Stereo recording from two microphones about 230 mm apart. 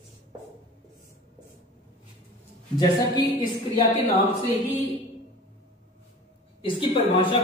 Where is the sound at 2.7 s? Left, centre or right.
Centre.